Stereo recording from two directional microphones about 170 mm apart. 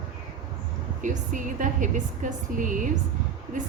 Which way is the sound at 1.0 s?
50° right (ahead or behind).